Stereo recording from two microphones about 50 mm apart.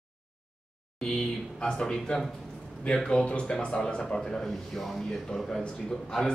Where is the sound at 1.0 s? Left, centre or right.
Centre.